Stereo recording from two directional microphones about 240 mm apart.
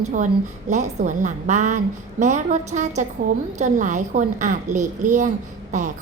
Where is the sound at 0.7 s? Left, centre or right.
Right.